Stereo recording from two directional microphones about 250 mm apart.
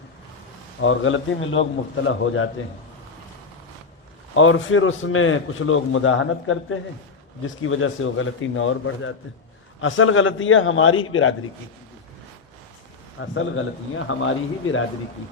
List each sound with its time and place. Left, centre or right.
0.8 s a man's voice: left
4.4 s a man's voice: left
13.1 s a man's voice: left